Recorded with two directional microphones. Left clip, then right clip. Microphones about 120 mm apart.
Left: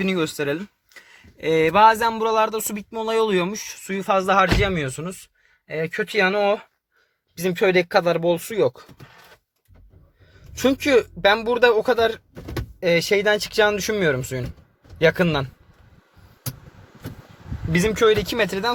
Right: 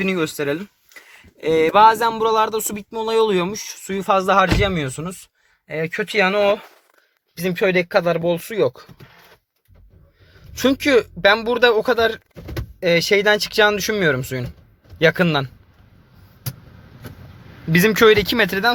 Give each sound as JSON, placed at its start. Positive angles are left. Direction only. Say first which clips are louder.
{"t": 0.0, "sound": "speech", "louder": "right 2 dB", "side_deg": 5}
{"t": 1.4, "sound": "speech", "louder": "right 2 dB", "side_deg": -15}
{"t": 3.2, "sound": "speech", "louder": "right 2 dB", "side_deg": -20}
{"t": 7.3, "sound": "speech", "louder": "even", "side_deg": 20}
{"t": 8.5, "sound": "speech", "louder": "right 1 dB", "side_deg": 5}
{"t": 10.3, "sound": "speech", "louder": "right 2 dB", "side_deg": 0}
{"t": 17.7, "sound": "speech", "louder": "right 5 dB", "side_deg": -5}
{"t": 17.9, "sound": "speech", "louder": "right 4 dB", "side_deg": -15}
{"t": 18.2, "sound": "speech", "louder": "right 5 dB", "side_deg": 0}